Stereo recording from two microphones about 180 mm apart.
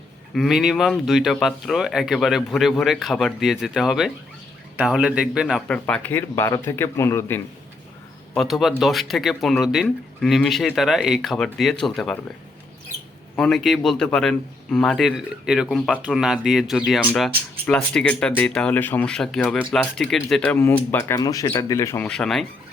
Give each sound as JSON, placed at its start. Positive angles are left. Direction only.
{"t": 0.3, "sound": "a man's voice", "side_deg": 0}
{"t": 8.3, "sound": "speech", "side_deg": 0}
{"t": 13.3, "sound": "a man's voice", "side_deg": 0}